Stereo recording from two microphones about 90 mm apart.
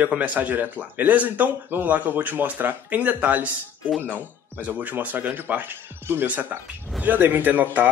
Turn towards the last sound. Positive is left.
turn(degrees=-20)  # may be behind; listen again after turning